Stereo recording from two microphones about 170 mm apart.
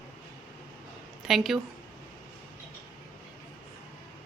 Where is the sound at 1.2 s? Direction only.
Centre (ahead or behind).